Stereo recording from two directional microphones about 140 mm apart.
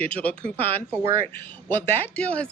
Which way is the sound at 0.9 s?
20° right (ahead or behind).